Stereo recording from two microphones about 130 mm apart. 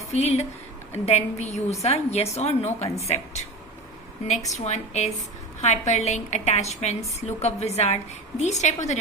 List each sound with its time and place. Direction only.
0.1 s a woman's voice: 55° left (ahead or behind)
4.3 s a woman's voice: 60° left (ahead or behind)